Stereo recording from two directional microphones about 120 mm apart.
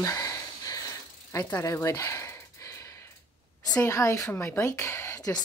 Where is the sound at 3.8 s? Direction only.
25° left (ahead or behind).